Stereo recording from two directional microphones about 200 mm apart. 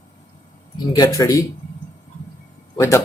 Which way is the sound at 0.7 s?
20° left (ahead or behind).